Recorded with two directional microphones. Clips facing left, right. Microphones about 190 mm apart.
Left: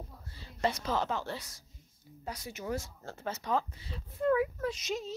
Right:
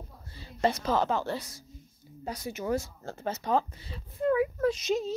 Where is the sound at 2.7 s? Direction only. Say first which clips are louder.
Right 5 dB; 40° right (ahead or behind).